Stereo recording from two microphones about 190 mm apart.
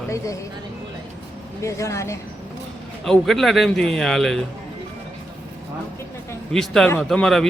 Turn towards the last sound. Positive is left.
turn(degrees=0)  # may be behind; listen again after turning